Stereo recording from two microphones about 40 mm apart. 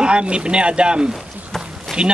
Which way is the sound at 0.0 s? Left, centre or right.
Right.